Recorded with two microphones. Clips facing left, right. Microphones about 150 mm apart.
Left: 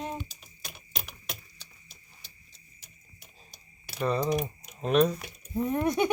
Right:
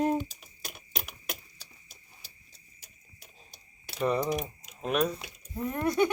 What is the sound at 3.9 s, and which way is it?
Typing, 20° right (ahead or behind).